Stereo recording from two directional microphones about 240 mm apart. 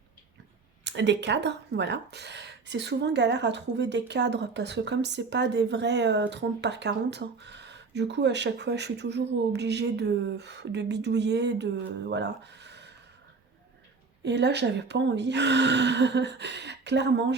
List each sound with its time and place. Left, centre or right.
0.9 s speech: right
14.3 s speech: right